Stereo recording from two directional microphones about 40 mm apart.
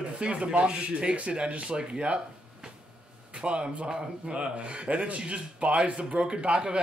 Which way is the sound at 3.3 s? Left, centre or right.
Right.